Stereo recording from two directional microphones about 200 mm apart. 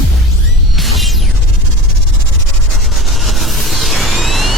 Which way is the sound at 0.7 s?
Centre (ahead or behind).